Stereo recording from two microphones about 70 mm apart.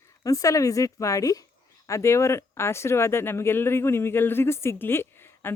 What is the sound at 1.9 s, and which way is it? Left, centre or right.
Speech, left.